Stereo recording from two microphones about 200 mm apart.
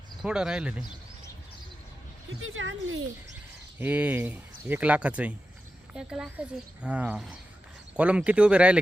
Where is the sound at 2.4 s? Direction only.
85° right.